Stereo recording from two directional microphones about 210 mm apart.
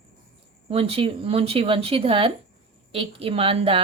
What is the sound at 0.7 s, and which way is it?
A woman's voice, 25° right (ahead or behind).